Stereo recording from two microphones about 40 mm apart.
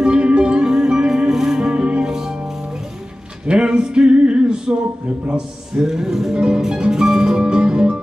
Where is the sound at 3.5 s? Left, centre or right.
Right.